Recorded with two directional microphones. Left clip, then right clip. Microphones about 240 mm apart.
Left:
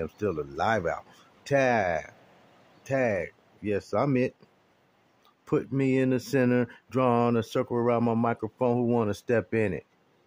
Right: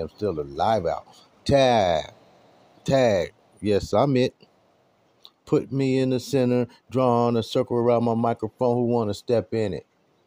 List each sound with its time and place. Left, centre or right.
0.0 s speech: centre
5.8 s speech: centre